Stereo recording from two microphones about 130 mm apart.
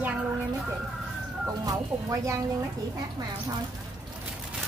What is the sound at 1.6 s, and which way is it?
Speech, 25° right (ahead or behind).